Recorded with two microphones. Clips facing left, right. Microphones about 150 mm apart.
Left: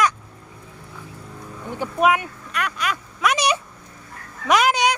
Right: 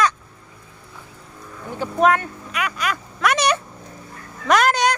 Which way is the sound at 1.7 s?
10° left (ahead or behind).